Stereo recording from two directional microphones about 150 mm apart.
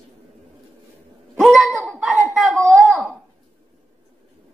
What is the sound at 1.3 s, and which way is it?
Wail, centre (ahead or behind).